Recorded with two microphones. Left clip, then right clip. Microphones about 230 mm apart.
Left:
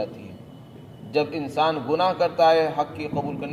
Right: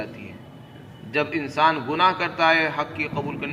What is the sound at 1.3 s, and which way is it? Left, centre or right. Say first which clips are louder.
A man's voice: right 3 dB; left.